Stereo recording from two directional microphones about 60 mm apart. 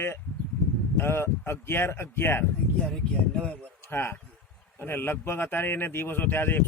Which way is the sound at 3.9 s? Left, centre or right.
Left.